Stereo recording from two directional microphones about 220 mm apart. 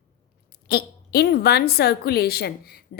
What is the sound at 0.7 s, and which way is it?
A woman's voice, 45° left (ahead or behind).